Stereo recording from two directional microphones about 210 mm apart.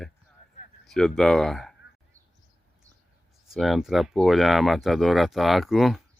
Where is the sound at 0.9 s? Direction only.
5° left (ahead or behind).